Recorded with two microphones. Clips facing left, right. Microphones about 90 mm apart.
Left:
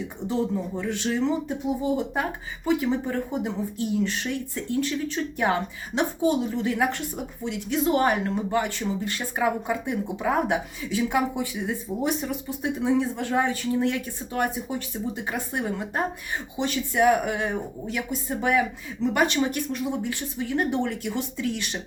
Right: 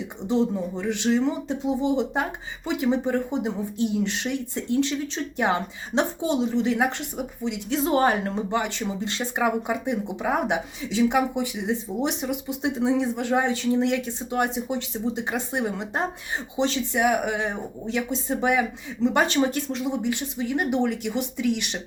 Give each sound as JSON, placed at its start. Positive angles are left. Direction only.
{"t": 0.3, "sound": "speech", "side_deg": -20}
{"t": 11.6, "sound": "speech", "side_deg": -20}
{"t": 20.1, "sound": "speech", "side_deg": -20}